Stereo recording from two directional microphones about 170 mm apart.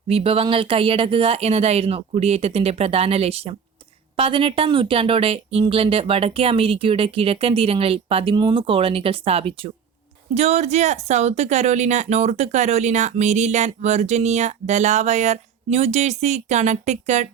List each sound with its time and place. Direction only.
0.1 s speech: 35° right (ahead or behind)